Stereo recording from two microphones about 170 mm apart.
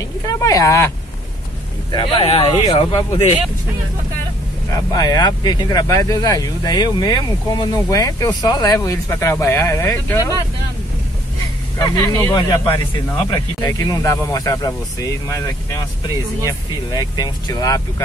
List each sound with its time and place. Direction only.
0.4 s speech: 20° left (ahead or behind)
1.9 s speech: 30° left (ahead or behind)
4.9 s speech: 20° left (ahead or behind)
11.8 s speech: 15° left (ahead or behind)
12.4 s speech: 25° left (ahead or behind)